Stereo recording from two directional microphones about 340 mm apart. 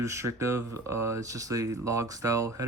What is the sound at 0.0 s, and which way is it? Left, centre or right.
Speech, centre.